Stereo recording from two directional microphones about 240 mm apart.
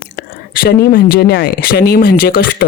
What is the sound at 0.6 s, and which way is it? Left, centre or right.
Speech, left.